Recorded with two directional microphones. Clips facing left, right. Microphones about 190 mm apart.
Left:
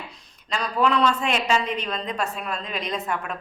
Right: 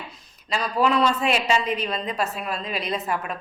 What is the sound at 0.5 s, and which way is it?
A woman's voice, 5° right (ahead or behind).